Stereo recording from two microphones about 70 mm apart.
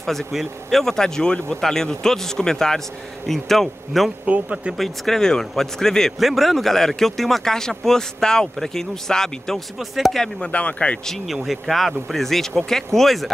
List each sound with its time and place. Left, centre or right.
0.0 s a man's voice: centre
4.3 s speech: centre
4.7 s a man's voice: centre
10.4 s speech: centre
11.3 s a man's voice: centre